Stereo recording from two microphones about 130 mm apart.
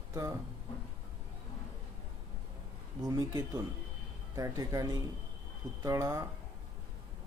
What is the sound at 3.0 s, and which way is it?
Speech, 30° right (ahead or behind).